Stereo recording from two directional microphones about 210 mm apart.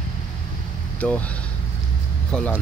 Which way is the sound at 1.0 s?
5° left (ahead or behind).